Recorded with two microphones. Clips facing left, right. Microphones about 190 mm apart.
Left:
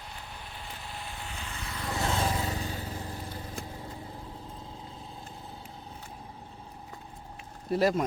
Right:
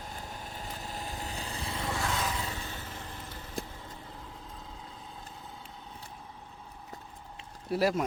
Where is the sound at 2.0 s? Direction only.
30° left (ahead or behind).